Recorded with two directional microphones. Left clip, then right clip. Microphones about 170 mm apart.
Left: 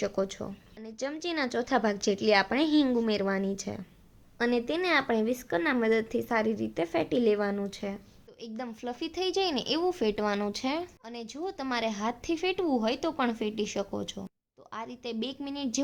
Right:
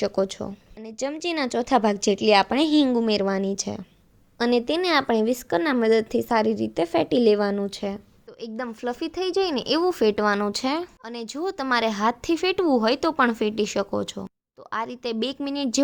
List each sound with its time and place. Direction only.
0.0 s a woman's voice: 30° right (ahead or behind)
8.4 s speech: 20° right (ahead or behind)